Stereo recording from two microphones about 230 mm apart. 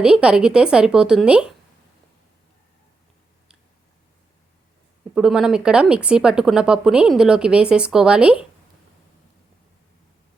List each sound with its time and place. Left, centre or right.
0.0 s speech: centre
5.1 s speech: centre